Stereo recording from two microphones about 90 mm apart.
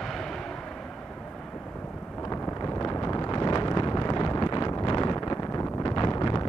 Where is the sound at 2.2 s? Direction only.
40° left (ahead or behind).